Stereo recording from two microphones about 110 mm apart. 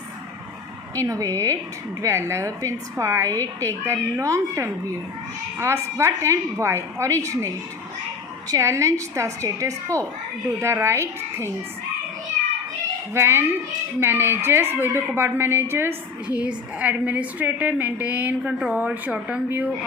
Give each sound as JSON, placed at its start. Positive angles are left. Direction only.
{"t": 0.9, "sound": "a woman's voice", "side_deg": -30}
{"t": 13.1, "sound": "a woman's voice", "side_deg": -20}
{"t": 16.2, "sound": "a woman's voice", "side_deg": -10}